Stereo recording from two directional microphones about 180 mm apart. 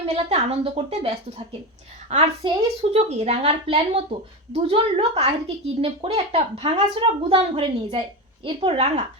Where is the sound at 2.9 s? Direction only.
35° right (ahead or behind).